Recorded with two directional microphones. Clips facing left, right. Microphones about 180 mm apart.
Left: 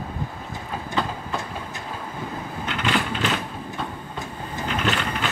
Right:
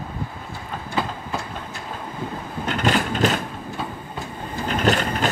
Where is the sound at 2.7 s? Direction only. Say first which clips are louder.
Right 4 dB; 40° right (ahead or behind).